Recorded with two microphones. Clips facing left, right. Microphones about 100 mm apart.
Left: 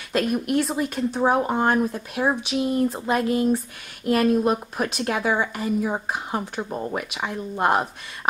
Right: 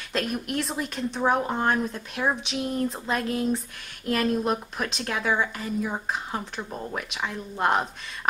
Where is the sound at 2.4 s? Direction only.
5° left (ahead or behind).